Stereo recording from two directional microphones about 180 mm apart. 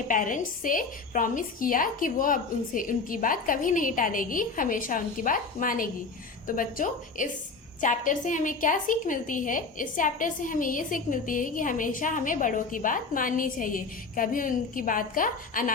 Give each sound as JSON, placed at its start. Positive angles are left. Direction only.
{"t": 0.1, "sound": "a woman's voice", "side_deg": 45}